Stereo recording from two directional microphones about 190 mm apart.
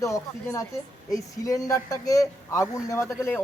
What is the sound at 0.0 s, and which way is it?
Speech, 15° left (ahead or behind).